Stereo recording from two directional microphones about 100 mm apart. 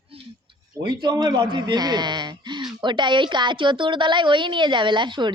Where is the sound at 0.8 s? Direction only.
50° right (ahead or behind).